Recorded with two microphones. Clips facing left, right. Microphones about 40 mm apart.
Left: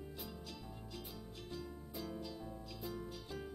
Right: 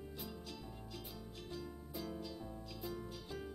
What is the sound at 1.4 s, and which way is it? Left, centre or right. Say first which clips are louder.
Music: even; centre.